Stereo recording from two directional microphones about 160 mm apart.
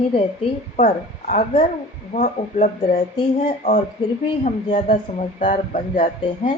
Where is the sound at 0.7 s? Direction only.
50° left (ahead or behind).